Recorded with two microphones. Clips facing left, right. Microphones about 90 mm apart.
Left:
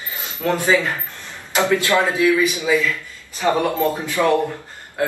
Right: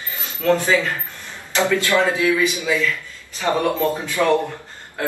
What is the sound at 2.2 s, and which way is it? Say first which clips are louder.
Speech: left 2 dB; 25° right (ahead or behind).